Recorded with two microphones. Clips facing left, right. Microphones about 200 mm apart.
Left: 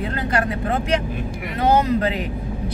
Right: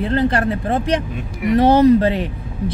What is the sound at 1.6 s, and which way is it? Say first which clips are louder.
Speech: right 6 dB; 30° right (ahead or behind).